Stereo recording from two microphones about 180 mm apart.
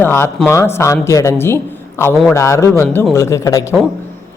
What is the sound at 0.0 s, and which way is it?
Speech, 15° left (ahead or behind).